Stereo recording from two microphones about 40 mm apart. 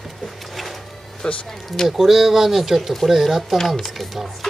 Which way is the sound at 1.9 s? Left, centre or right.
Centre.